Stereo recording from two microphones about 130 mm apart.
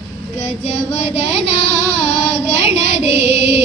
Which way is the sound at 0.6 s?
55° left (ahead or behind).